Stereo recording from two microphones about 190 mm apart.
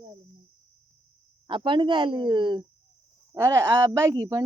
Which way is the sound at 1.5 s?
25° right (ahead or behind).